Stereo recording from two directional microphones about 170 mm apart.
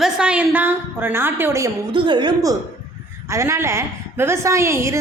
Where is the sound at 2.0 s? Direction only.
30° right (ahead or behind).